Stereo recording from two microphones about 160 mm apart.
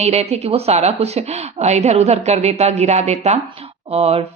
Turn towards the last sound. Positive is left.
turn(degrees=-40)  # may be behind; listen again after turning